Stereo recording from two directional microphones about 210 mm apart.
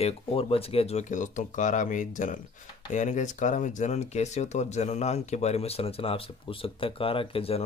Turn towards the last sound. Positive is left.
turn(degrees=25)  # may be behind; listen again after turning